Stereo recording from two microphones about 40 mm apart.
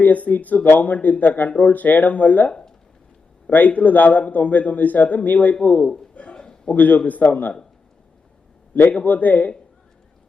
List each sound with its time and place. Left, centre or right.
0.0 s speech: left
2.5 s a sound: left
3.5 s a man's voice: left
6.1 s a sound: left
6.7 s speech: left
8.7 s a man's voice: left